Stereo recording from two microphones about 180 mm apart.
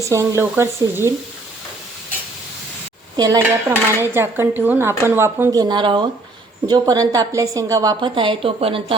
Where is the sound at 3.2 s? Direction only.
20° right (ahead or behind).